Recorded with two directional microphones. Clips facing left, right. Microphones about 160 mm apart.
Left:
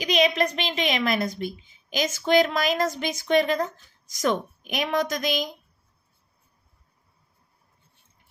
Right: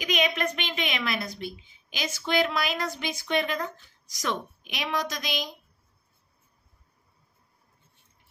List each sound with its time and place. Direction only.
0.0 s a woman's voice: 35° left (ahead or behind)